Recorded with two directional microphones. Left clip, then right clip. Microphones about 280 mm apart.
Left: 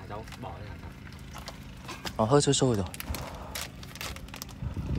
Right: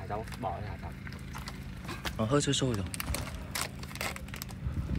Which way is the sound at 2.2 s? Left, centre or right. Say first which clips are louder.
Left 6 dB; centre.